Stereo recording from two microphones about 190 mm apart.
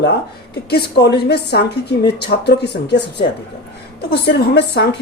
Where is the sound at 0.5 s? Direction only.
60° left (ahead or behind).